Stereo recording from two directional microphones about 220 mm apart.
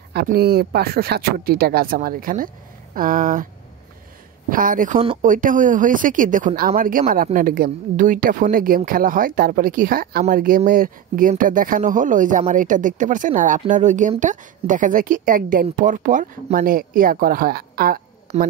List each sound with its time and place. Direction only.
0.1 s speech: 45° right (ahead or behind)
4.5 s speech: 40° right (ahead or behind)
18.3 s speech: 30° right (ahead or behind)